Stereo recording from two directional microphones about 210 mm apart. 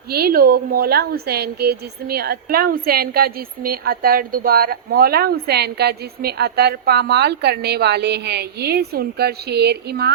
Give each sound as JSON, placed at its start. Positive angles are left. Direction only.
{"t": 0.1, "sound": "a woman's voice", "side_deg": -45}